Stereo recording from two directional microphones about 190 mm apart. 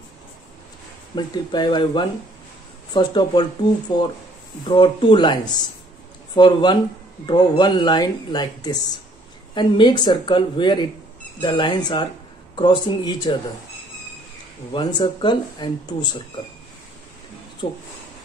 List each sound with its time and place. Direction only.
1.1 s speech: 25° left (ahead or behind)
14.7 s speech: 25° left (ahead or behind)
17.6 s speech: 30° left (ahead or behind)